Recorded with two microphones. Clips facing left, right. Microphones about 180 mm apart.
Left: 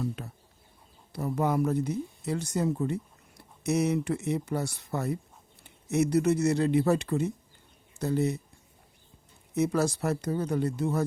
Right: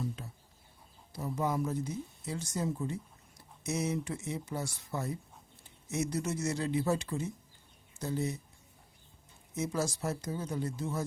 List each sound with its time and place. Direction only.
1.1 s speech: 65° left (ahead or behind)
9.6 s speech: 65° left (ahead or behind)